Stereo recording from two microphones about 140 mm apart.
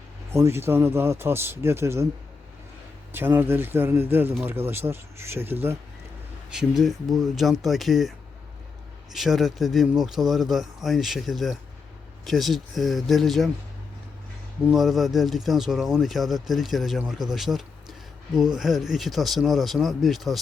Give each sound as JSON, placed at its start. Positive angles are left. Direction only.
{"t": 0.3, "sound": "speech", "side_deg": -20}
{"t": 3.1, "sound": "speech", "side_deg": -15}
{"t": 6.5, "sound": "speech", "side_deg": -5}
{"t": 9.1, "sound": "speech", "side_deg": 0}
{"t": 14.7, "sound": "speech", "side_deg": 0}